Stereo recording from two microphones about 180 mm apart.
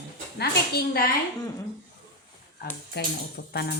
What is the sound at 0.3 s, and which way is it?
Speech, 60° left (ahead or behind).